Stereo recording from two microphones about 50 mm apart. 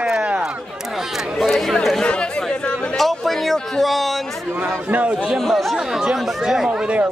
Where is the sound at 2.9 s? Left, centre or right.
Centre.